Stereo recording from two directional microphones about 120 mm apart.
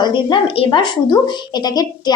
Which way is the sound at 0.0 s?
40° left (ahead or behind).